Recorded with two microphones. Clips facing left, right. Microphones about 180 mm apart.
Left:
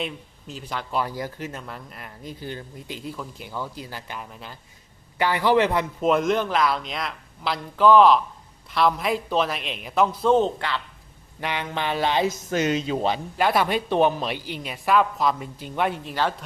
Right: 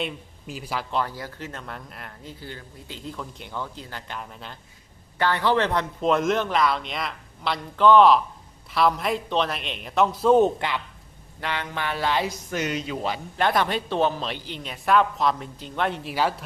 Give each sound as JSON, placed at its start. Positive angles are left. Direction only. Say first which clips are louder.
{"t": 0.0, "sound": "speech", "louder": "even", "side_deg": -10}
{"t": 0.9, "sound": "speech", "louder": "left 4 dB", "side_deg": 10}
{"t": 1.6, "sound": "a man's voice", "louder": "even", "side_deg": 0}
{"t": 2.2, "sound": "a man's voice", "louder": "left 7 dB", "side_deg": 15}
{"t": 10.3, "sound": "speech", "louder": "right 2 dB", "side_deg": -15}
{"t": 11.3, "sound": "speech", "louder": "left 2 dB", "side_deg": 15}
{"t": 13.3, "sound": "speech", "louder": "even", "side_deg": 5}
{"t": 16.0, "sound": "speech", "louder": "right 1 dB", "side_deg": -10}